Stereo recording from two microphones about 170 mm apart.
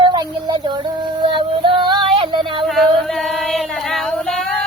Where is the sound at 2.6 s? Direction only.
Centre (ahead or behind).